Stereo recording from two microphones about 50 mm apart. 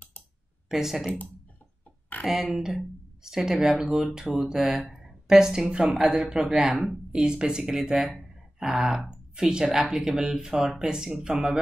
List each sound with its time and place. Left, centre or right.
0.7 s speech: centre
2.2 s speech: centre